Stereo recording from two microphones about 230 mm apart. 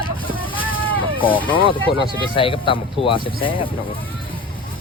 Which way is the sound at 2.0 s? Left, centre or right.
Left.